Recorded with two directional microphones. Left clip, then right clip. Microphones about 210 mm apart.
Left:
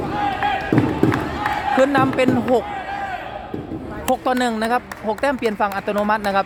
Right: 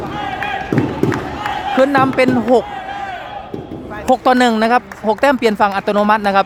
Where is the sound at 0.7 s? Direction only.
30° right (ahead or behind).